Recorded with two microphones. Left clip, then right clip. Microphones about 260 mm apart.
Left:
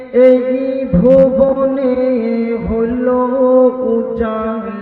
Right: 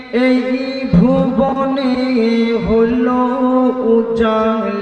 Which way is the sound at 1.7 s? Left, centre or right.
Right.